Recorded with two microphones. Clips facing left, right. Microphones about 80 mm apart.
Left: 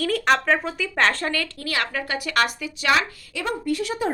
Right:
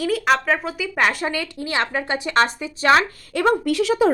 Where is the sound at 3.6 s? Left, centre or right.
Right.